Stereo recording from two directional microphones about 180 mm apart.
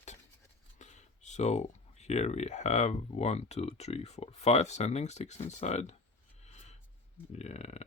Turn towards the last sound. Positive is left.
turn(degrees=35)  # may be behind; listen again after turning